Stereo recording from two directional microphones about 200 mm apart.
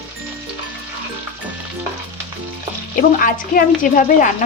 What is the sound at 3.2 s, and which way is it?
A woman's voice, 45° left (ahead or behind).